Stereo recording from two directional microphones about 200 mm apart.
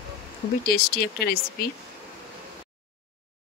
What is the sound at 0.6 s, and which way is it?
Speech, 50° left (ahead or behind).